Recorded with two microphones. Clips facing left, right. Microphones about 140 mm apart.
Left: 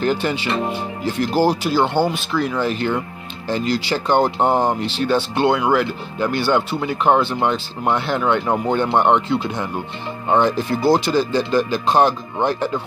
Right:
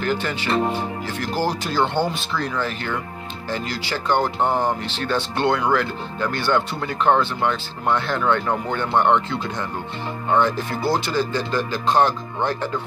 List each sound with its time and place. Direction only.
0.0 s speech: 20° left (ahead or behind)
2.5 s speech: 20° left (ahead or behind)